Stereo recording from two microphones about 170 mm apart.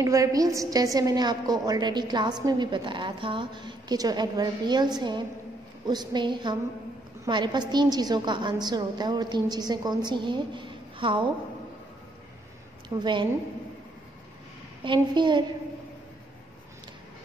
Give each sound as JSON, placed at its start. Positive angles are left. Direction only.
{"t": 0.0, "sound": "a woman's voice", "side_deg": -20}
{"t": 13.0, "sound": "a woman's voice", "side_deg": -25}
{"t": 14.8, "sound": "a woman's voice", "side_deg": -30}